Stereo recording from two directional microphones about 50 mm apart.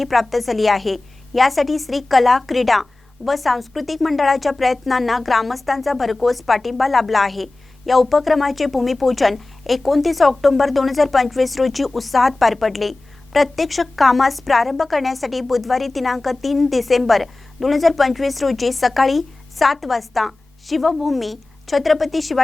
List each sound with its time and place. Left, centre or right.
0.0 s a woman's voice: centre